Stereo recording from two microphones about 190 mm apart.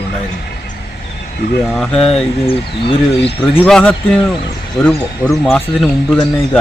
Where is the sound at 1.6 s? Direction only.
Centre (ahead or behind).